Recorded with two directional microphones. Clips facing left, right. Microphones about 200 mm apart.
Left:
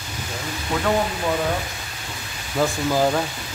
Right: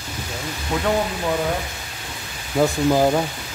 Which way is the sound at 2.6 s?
15° right (ahead or behind).